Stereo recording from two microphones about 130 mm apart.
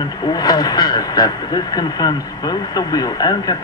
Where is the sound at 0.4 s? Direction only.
30° left (ahead or behind).